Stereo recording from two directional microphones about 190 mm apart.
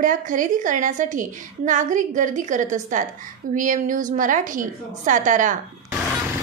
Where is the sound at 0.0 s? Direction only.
45° right (ahead or behind).